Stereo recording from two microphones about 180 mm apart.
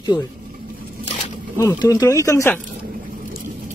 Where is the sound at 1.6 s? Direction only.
15° left (ahead or behind).